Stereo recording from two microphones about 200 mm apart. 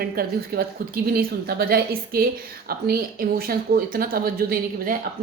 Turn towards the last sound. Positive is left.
turn(degrees=-45)  # may be behind; listen again after turning